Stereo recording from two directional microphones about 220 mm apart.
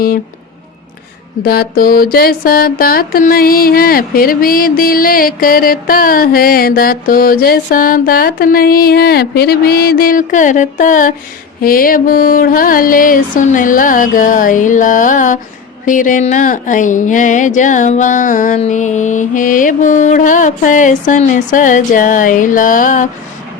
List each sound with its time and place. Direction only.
1.4 s mantra: 45° left (ahead or behind)